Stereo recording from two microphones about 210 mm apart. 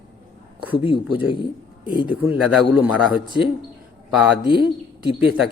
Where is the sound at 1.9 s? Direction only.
20° left (ahead or behind).